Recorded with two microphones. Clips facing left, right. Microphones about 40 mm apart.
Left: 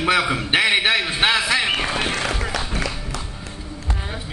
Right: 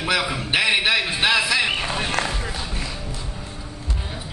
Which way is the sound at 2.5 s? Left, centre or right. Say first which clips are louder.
Left 5 dB; left.